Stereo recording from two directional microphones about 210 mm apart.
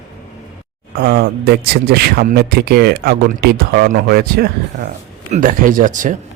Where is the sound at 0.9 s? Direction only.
50° right (ahead or behind).